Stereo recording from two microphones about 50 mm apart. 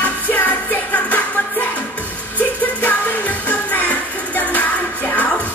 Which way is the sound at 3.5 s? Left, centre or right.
Left.